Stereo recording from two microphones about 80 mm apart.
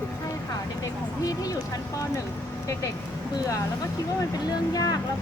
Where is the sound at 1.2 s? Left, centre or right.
Left.